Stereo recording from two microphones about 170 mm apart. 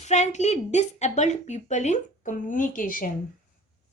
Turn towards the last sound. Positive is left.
turn(degrees=55)  # may be behind; listen again after turning